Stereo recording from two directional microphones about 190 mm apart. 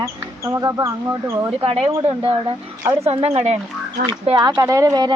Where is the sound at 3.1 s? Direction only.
35° right (ahead or behind).